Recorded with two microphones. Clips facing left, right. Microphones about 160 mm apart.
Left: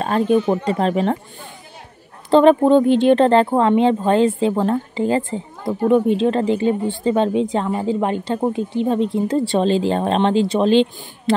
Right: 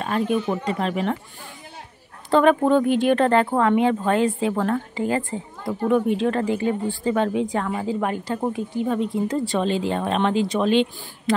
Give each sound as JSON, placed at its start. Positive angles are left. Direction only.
{"t": 0.0, "sound": "speech", "side_deg": 35}
{"t": 2.3, "sound": "speech", "side_deg": 25}